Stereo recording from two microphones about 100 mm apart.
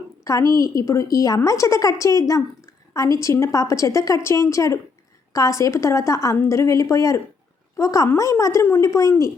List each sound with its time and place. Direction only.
0.3 s a woman's voice: 35° left (ahead or behind)